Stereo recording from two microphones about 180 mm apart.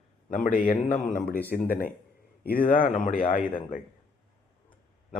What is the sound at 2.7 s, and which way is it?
Speech, 45° left (ahead or behind).